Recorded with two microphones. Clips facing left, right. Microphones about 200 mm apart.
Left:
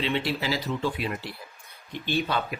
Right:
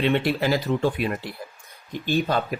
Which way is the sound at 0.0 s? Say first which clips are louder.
Right 6 dB; 55° right (ahead or behind).